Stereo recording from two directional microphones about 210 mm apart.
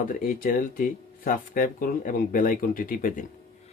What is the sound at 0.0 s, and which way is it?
Speech, 40° left (ahead or behind).